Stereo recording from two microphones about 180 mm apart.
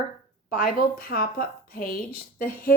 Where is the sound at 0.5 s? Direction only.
55° left (ahead or behind).